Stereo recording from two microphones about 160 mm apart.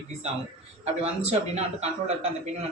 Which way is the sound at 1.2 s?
40° right (ahead or behind).